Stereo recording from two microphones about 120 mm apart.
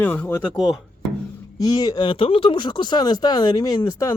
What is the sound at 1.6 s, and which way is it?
Speech, 30° left (ahead or behind).